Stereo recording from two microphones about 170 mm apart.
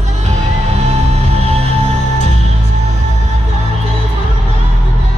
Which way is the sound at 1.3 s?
35° right (ahead or behind).